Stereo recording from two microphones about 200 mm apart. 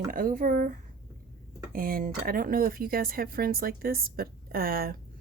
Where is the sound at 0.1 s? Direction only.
45° right (ahead or behind).